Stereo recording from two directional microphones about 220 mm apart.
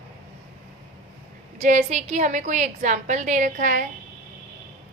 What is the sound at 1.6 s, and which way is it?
A woman's voice, 30° right (ahead or behind).